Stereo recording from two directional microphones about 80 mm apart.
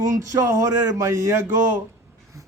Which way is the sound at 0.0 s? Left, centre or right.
Right.